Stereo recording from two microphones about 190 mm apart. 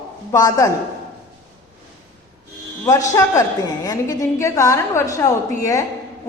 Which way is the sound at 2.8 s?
15° left (ahead or behind).